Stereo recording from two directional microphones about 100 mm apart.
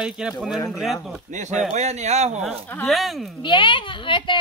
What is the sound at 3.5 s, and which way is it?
Speech, 55° left (ahead or behind).